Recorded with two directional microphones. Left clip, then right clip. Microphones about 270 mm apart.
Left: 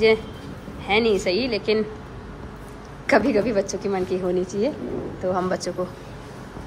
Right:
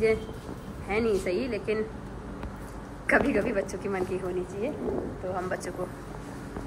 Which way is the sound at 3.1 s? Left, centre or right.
Left.